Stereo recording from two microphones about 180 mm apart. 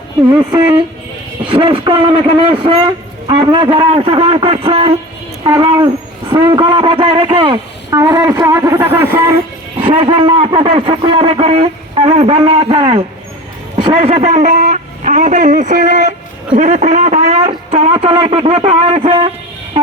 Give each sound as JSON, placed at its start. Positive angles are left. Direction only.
{"t": 0.3, "sound": "a man's voice", "side_deg": -25}
{"t": 5.4, "sound": "a man's voice", "side_deg": -20}
{"t": 9.7, "sound": "a man's voice", "side_deg": -30}
{"t": 16.6, "sound": "a sound", "side_deg": -40}
{"t": 17.9, "sound": "a man's voice", "side_deg": -30}